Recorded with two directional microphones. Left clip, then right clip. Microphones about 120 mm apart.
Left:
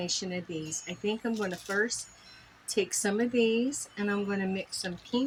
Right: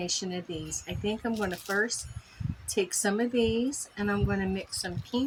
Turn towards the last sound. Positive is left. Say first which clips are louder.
# even
turn(degrees=-15)  # may be behind; listen again after turning